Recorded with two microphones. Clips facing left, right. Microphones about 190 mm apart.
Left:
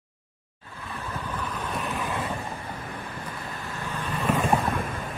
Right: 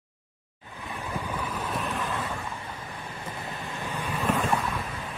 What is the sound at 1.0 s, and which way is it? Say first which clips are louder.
Vehicle: right 1 dB; 10° right (ahead or behind).